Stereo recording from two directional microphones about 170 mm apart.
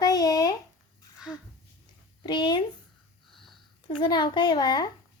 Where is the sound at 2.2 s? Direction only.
25° left (ahead or behind).